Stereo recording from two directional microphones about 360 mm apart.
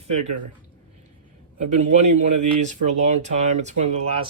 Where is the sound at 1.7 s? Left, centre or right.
Centre.